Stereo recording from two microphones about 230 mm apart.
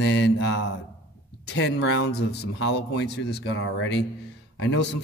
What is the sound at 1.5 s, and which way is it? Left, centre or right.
Speech, left.